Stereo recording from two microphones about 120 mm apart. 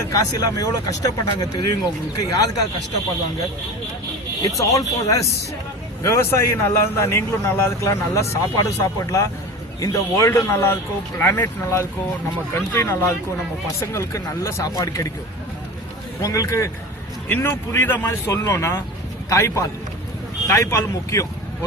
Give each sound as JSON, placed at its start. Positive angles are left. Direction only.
{"t": 0.1, "sound": "speech", "side_deg": 30}
{"t": 4.4, "sound": "a man's voice", "side_deg": 30}
{"t": 16.2, "sound": "a man's voice", "side_deg": 25}